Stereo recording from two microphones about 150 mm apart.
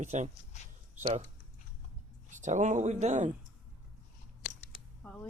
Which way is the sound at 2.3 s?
55° right (ahead or behind).